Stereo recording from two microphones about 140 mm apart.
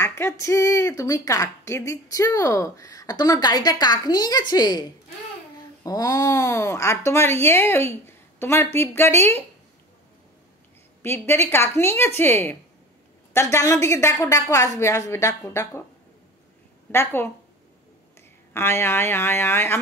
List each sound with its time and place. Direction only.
0.0 s a woman's voice: 20° left (ahead or behind)
5.9 s a woman's voice: 25° left (ahead or behind)
11.0 s a woman's voice: 15° left (ahead or behind)
16.9 s speech: 15° left (ahead or behind)
18.5 s speech: 15° left (ahead or behind)